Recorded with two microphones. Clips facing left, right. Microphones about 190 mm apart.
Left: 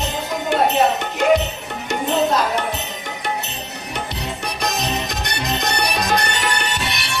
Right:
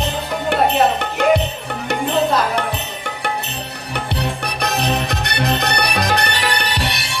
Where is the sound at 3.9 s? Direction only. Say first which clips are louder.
Right 5 dB; 65° right (ahead or behind).